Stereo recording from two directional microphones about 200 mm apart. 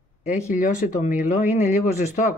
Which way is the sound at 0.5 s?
40° left (ahead or behind).